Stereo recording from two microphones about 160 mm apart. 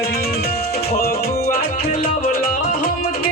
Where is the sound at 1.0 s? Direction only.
80° left.